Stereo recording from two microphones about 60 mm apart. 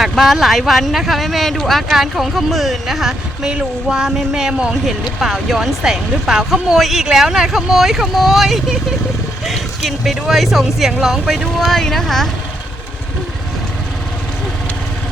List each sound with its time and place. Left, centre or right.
0.0 s speech: centre